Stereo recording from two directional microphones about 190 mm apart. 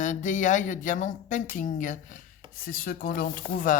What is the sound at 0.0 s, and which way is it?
Speech, 40° left (ahead or behind).